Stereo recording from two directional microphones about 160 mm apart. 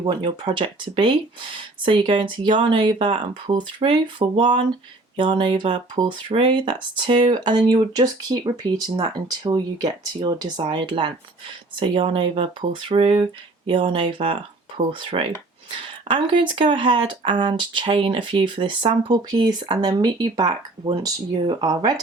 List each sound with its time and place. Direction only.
0.0 s speech: 30° right (ahead or behind)